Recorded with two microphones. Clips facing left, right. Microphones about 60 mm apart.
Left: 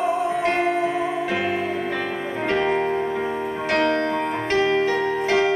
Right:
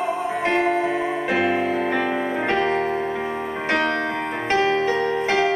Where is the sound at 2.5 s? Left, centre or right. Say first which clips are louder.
Left 2 dB; centre.